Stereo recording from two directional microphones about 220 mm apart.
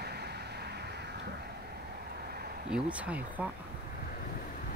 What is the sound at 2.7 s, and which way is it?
Speech, 5° right (ahead or behind).